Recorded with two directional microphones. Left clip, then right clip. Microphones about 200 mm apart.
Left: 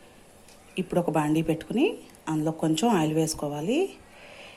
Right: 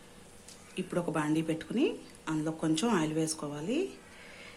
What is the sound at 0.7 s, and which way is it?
A woman's voice, 20° left (ahead or behind).